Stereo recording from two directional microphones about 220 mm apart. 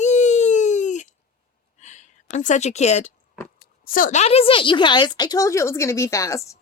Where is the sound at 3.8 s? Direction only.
40° left (ahead or behind); by 6.6 s 15° left (ahead or behind).